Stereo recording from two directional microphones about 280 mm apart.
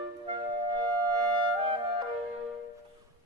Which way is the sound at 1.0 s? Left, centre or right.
Centre.